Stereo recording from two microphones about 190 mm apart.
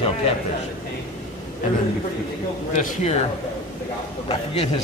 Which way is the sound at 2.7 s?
40° left (ahead or behind).